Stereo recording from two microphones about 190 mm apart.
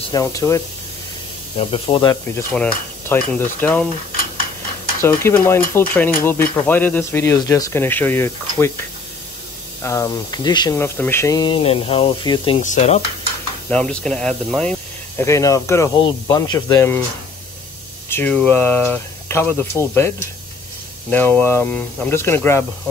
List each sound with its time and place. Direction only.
0.1 s speech: 15° left (ahead or behind)
1.6 s speech: 25° left (ahead or behind)
2.5 s stir: 5° left (ahead or behind)
3.5 s speech: 10° left (ahead or behind)
5.0 s speech: 15° left (ahead or behind)
9.8 s speech: 15° left (ahead or behind)
12.5 s sizzle: 40° left (ahead or behind)
13.7 s speech: 5° left (ahead or behind)
18.1 s speech: 10° left (ahead or behind)
21.1 s speech: 10° left (ahead or behind)